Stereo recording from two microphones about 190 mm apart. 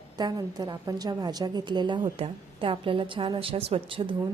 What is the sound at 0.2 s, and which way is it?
A woman's voice, 20° right (ahead or behind).